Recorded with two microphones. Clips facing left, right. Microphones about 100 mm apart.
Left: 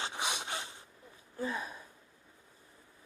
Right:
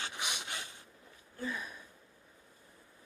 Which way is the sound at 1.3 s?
30° left (ahead or behind).